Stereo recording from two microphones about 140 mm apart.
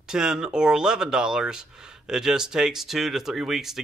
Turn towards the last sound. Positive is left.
turn(degrees=-5)  # may be behind; listen again after turning